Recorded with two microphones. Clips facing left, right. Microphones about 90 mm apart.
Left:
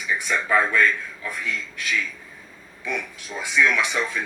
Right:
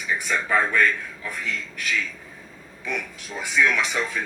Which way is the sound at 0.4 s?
30° right (ahead or behind).